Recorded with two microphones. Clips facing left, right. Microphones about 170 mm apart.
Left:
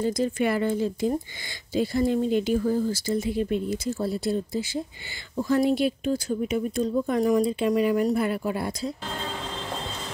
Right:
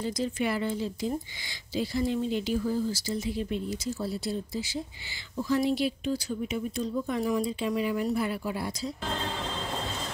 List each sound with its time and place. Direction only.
0.0 s speech: 50° left (ahead or behind)